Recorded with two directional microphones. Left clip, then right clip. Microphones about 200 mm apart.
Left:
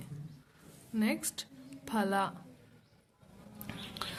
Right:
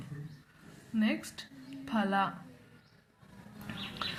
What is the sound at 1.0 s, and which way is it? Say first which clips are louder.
A woman's voice: even; 30° left (ahead or behind).